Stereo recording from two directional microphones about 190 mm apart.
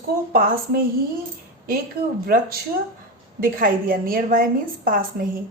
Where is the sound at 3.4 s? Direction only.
45° right (ahead or behind).